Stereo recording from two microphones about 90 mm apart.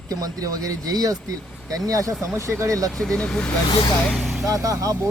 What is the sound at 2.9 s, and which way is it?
Speech, 5° left (ahead or behind).